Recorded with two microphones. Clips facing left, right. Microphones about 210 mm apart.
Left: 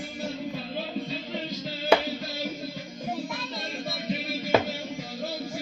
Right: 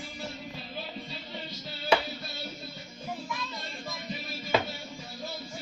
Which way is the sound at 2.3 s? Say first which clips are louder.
Left 8 dB; 90° left.